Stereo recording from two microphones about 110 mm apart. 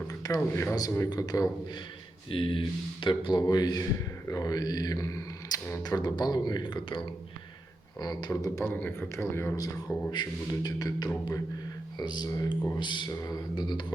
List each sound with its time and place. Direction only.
0.2 s speech: 30° left (ahead or behind)
2.3 s speech: 50° left (ahead or behind); by 5.8 s 25° left (ahead or behind)
5.8 s a man's voice: 35° left (ahead or behind); by 9.6 s 20° left (ahead or behind)
9.6 s speech: 40° left (ahead or behind)